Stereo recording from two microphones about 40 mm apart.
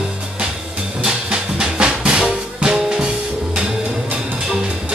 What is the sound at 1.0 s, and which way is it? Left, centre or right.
Music, centre.